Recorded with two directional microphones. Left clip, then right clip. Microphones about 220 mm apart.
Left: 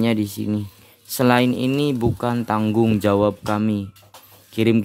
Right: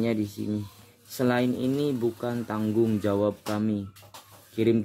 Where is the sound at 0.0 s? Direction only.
40° left (ahead or behind).